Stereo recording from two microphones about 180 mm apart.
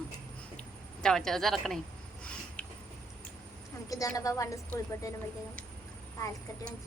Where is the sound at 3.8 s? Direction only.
20° left (ahead or behind).